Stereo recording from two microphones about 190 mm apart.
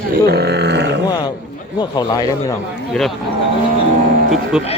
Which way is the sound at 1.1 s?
25° left (ahead or behind).